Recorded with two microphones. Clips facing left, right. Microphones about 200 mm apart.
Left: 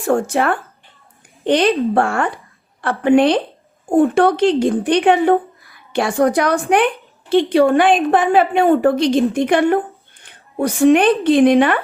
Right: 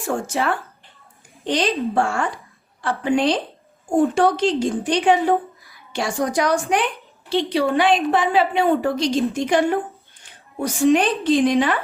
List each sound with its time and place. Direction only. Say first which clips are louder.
0.0 s a woman's voice: left 6 dB; 55° left (ahead or behind)